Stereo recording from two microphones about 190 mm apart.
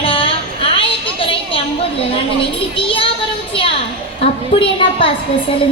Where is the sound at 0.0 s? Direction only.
30° left (ahead or behind).